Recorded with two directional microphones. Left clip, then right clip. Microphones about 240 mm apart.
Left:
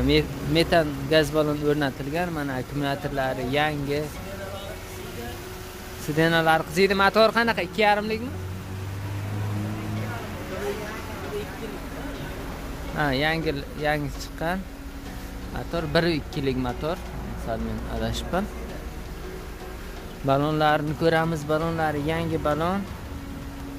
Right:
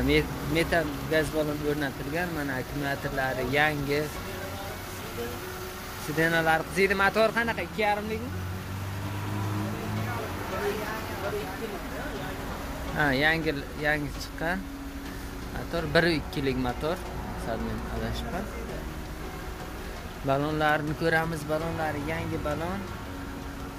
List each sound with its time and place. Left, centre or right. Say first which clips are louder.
0.0 s speech: left 3 dB; centre
2.3 s speech: left 2 dB; centre
6.1 s speech: left 4 dB; centre
12.9 s speech: even; centre
15.7 s speech: left 1 dB; centre
20.2 s speech: left 4 dB; centre